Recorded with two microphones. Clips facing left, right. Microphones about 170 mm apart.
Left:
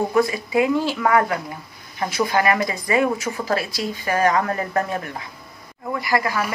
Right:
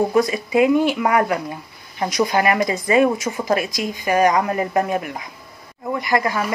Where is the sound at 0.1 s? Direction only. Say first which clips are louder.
Right 2 dB; 20° right (ahead or behind).